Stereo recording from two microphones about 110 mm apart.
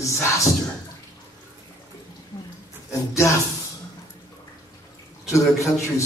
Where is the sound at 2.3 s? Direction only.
40° left (ahead or behind).